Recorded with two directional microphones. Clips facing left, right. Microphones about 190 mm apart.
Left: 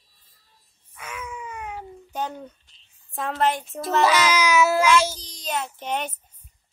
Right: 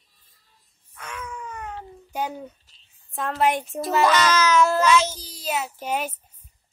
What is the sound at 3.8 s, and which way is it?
A child's voice, centre (ahead or behind).